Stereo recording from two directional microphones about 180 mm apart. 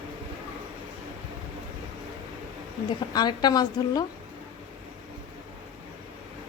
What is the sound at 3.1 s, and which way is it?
Speech, 25° left (ahead or behind).